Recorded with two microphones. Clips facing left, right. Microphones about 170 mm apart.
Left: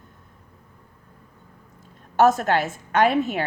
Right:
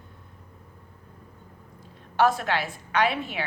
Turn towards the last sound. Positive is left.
turn(degrees=45)  # may be behind; listen again after turning